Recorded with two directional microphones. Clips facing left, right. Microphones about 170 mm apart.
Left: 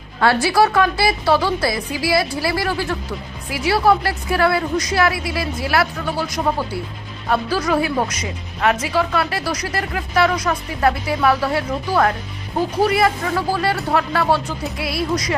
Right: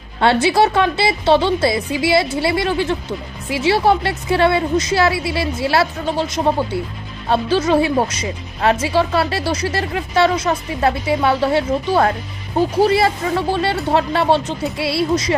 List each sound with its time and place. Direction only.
0.2 s speech: 20° right (ahead or behind)